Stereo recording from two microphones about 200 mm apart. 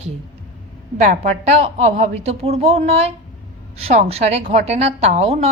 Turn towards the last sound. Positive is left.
turn(degrees=-30)  # may be behind; listen again after turning